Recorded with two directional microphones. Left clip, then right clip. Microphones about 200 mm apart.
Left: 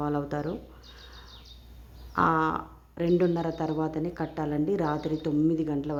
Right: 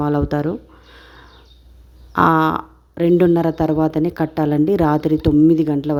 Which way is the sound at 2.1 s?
45° right (ahead or behind).